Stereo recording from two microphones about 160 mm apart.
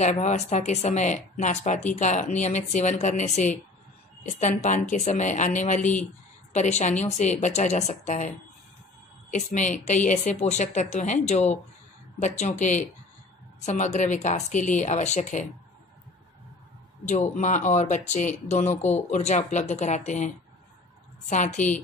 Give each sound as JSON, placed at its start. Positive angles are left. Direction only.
{"t": 0.0, "sound": "a woman's voice", "side_deg": 45}
{"t": 9.3, "sound": "a woman's voice", "side_deg": 50}
{"t": 12.2, "sound": "a woman's voice", "side_deg": 50}
{"t": 17.1, "sound": "a woman's voice", "side_deg": 50}
{"t": 21.3, "sound": "a woman's voice", "side_deg": 50}
{"t": 21.5, "sound": "a woman's voice", "side_deg": 10}